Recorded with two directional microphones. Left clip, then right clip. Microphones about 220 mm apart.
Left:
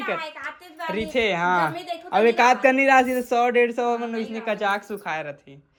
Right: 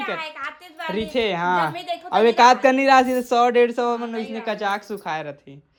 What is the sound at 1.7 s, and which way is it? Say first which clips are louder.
Speech: right 3 dB; centre (ahead or behind).